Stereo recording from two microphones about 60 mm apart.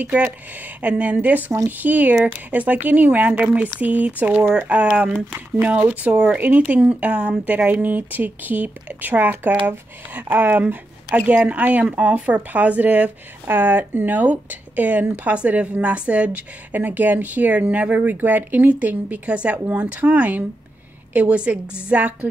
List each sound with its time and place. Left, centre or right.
0.0 s speech: right
6.1 s speech: centre
6.4 s speech: right